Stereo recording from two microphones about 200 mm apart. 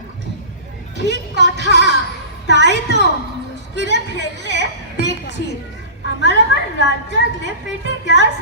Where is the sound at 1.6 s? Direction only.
60° left (ahead or behind).